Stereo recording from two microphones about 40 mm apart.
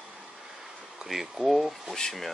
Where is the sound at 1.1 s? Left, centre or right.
Centre.